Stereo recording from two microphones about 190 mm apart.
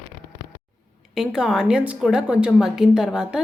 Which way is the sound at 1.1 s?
5° right (ahead or behind).